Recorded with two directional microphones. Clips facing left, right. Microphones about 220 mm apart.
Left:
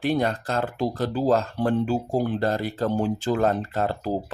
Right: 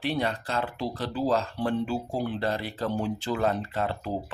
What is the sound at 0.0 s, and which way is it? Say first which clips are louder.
Speech: left 5 dB; 45° left (ahead or behind).